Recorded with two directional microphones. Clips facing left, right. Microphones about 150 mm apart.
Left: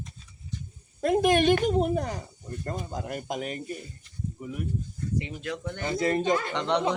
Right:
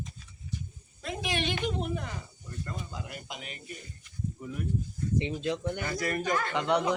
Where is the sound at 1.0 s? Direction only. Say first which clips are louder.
Left 12 dB; 50° left (ahead or behind).